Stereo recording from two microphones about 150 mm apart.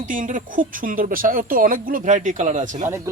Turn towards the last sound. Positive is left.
turn(degrees=-20)  # may be behind; listen again after turning